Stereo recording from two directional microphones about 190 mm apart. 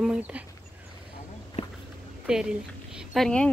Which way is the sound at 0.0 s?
5° right (ahead or behind).